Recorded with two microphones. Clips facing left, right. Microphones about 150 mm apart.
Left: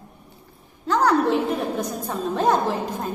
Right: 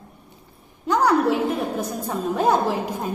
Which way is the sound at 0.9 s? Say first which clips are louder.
Right 1 dB; 10° right (ahead or behind).